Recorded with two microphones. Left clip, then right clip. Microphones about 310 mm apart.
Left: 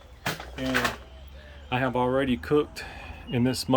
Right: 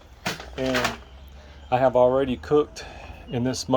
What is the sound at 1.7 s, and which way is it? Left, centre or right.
Speech, centre.